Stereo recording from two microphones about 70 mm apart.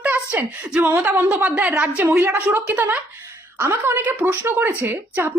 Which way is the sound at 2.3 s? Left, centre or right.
Right.